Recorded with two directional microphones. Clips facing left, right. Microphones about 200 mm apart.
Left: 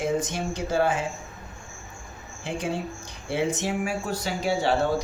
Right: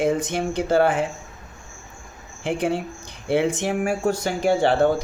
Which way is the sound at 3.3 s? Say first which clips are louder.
Right 5 dB; 55° right (ahead or behind).